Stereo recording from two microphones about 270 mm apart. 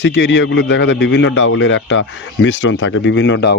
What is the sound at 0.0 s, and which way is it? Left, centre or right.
A man's voice, left.